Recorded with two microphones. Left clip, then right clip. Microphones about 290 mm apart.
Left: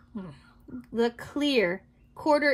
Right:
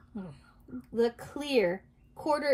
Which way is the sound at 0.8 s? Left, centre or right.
Centre.